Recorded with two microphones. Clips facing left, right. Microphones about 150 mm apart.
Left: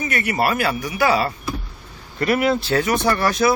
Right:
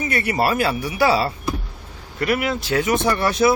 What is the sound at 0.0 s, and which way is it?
Speech, 30° right (ahead or behind).